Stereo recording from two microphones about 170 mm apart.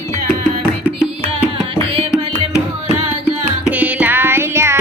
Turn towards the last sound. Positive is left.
turn(degrees=-15)  # may be behind; listen again after turning